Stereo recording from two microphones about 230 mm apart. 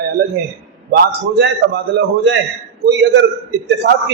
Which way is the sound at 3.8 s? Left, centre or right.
Right.